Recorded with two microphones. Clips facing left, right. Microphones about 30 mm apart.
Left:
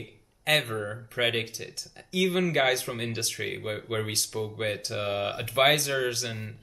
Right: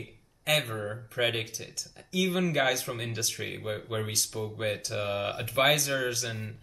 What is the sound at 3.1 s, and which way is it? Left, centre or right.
Speech, left.